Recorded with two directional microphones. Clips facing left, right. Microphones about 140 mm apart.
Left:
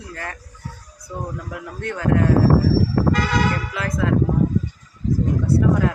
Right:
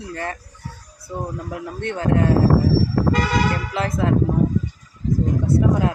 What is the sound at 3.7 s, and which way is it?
Speech, 25° right (ahead or behind).